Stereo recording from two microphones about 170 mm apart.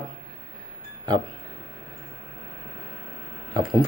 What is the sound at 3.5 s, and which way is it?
Speech, 30° right (ahead or behind).